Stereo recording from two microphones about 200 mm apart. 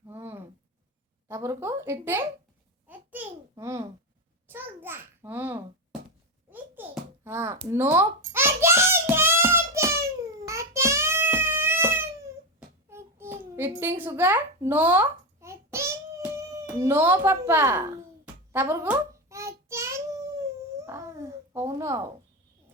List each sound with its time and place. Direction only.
0.1 s a sound: 10° right (ahead or behind)
1.3 s speech: 15° right (ahead or behind)
2.8 s babbling: 10° right (ahead or behind)
3.5 s a child's voice: 15° right (ahead or behind)
6.5 s babbling: 10° right (ahead or behind)
7.7 s a sound: 10° right (ahead or behind)
18.5 s child singing: 10° right (ahead or behind)
20.8 s babbling: 15° right (ahead or behind)